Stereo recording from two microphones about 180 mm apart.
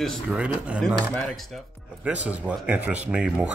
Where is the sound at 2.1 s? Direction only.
5° right (ahead or behind).